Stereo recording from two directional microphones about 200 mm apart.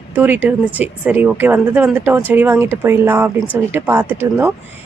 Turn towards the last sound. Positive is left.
turn(degrees=-10)  # may be behind; listen again after turning